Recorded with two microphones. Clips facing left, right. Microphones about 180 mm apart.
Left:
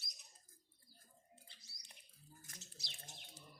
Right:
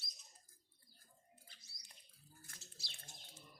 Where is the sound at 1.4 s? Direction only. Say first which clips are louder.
Left 1 dB; 20° left (ahead or behind).